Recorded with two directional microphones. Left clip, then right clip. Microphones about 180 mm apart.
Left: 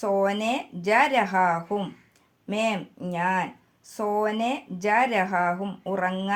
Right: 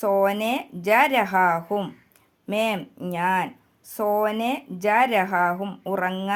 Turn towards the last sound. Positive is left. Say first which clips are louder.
# right 1 dB
turn(degrees=-30)  # may be behind; listen again after turning